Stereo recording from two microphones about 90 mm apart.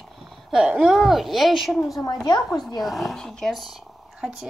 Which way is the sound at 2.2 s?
50° left (ahead or behind).